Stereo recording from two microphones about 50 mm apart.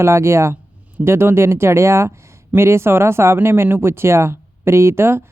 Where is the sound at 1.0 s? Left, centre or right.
Right.